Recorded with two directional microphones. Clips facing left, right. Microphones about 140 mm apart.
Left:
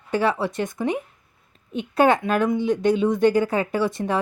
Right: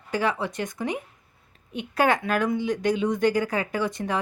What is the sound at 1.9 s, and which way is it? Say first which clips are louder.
A woman's voice: left 4 dB; 25° left (ahead or behind).